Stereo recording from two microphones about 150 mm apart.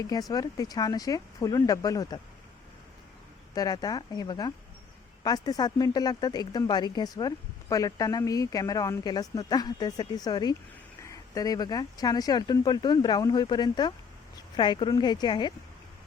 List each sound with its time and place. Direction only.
0.0 s speech: 25° left (ahead or behind)
3.5 s speech: 25° left (ahead or behind)